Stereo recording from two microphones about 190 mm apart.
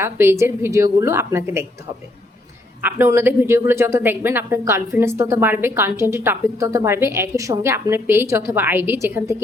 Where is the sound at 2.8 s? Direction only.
10° right (ahead or behind).